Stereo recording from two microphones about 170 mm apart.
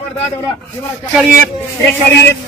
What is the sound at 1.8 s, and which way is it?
Speech, 5° left (ahead or behind).